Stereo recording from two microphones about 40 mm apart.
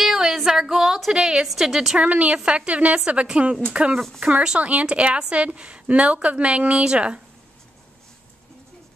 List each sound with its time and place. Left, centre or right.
0.0 s a sound: centre
1.5 s a woman's voice: centre
2.0 s a woman's voice: right